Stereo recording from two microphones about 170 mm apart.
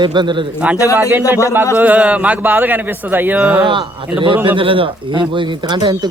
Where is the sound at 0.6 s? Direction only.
10° right (ahead or behind).